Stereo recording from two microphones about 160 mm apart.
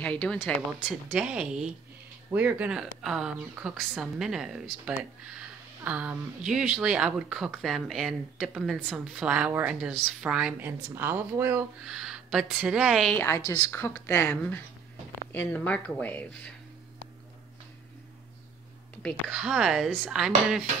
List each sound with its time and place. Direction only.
0.0 s speech: 5° left (ahead or behind)
1.1 s a woman's voice: 5° right (ahead or behind)
11.9 s a woman's voice: centre (ahead or behind)
13.1 s speech: 15° left (ahead or behind)
19.3 s a woman's voice: 5° right (ahead or behind)